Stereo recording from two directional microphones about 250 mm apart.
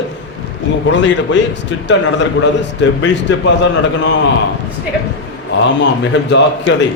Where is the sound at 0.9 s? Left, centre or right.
Left.